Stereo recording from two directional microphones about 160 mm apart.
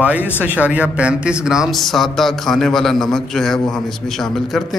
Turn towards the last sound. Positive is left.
turn(degrees=0)  # may be behind; listen again after turning